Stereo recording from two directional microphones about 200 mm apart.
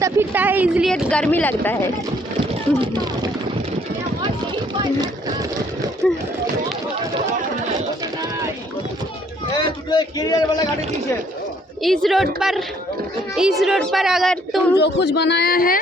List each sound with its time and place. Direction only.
0.0 s speech: 10° right (ahead or behind); by 1.9 s 10° left (ahead or behind)
2.8 s speech: 20° right (ahead or behind)
4.7 s speech: 20° right (ahead or behind)
6.0 s a sound: 5° left (ahead or behind)
9.6 s a man's voice: 20° left (ahead or behind)
11.8 s speech: centre (ahead or behind)
14.8 s speech: 60° left (ahead or behind)